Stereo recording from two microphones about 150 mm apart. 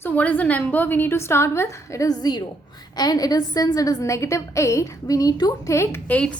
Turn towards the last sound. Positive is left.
turn(degrees=10)  # may be behind; listen again after turning